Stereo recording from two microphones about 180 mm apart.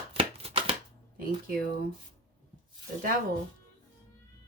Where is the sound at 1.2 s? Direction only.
55° right (ahead or behind).